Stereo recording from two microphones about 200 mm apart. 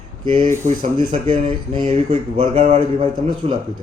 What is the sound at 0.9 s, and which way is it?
Speech, 25° right (ahead or behind).